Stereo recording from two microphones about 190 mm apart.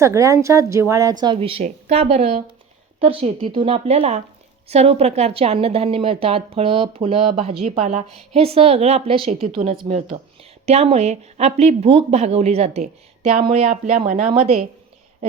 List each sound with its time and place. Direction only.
0.0 s speech: 15° right (ahead or behind)
1.2 s a woman's voice: 25° right (ahead or behind)